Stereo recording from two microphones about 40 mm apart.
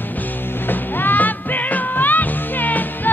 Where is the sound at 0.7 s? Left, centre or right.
Left.